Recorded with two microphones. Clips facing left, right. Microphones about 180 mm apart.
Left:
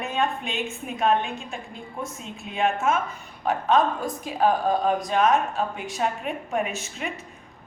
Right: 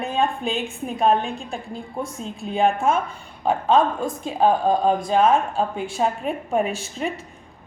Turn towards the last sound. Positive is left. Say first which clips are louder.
# right 5 dB
turn(degrees=-35)  # may be behind; listen again after turning